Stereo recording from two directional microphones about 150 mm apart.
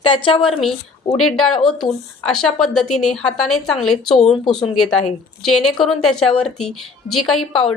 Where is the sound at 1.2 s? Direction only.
5° left (ahead or behind).